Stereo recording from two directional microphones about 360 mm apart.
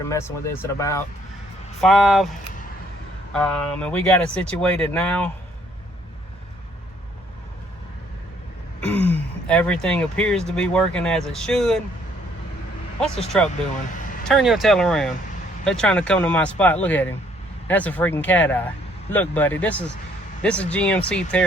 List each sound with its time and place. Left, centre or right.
0.0 s speech: centre
3.3 s speech: centre
8.9 s speech: centre
13.0 s speech: centre
13.9 s a sound: left
14.3 s speech: centre